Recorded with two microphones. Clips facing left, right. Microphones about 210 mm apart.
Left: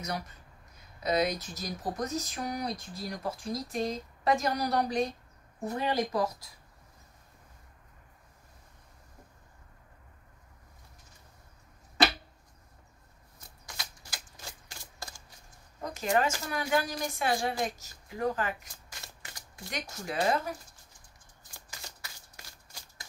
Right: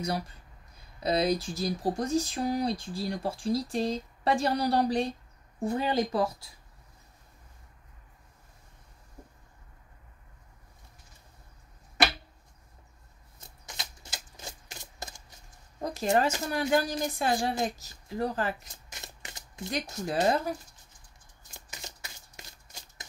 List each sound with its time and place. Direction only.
1.0 s speech: 30° right (ahead or behind)
13.7 s typewriter: 20° right (ahead or behind)
15.8 s speech: 35° right (ahead or behind)
18.9 s a sound: 20° right (ahead or behind)
20.1 s speech: 40° right (ahead or behind)
21.5 s shuffling cards: 20° right (ahead or behind)